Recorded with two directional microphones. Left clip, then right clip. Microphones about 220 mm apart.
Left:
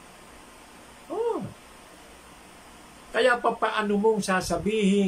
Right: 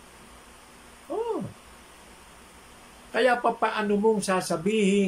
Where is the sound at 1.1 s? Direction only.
10° left (ahead or behind).